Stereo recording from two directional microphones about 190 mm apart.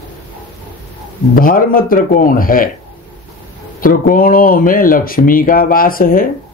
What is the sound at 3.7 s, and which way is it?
Speech, 50° left (ahead or behind).